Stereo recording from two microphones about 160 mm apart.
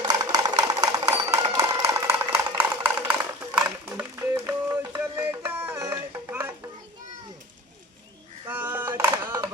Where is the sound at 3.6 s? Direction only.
10° right (ahead or behind).